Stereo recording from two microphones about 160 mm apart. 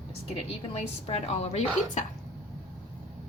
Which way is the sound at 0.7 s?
40° left (ahead or behind).